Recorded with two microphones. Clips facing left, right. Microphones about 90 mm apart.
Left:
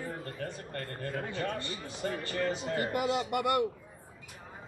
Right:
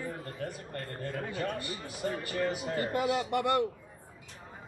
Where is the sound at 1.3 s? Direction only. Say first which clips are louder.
Right 1 dB; 30° left (ahead or behind).